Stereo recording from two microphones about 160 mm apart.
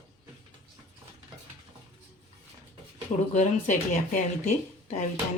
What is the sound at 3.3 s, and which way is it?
Speech, 50° left (ahead or behind).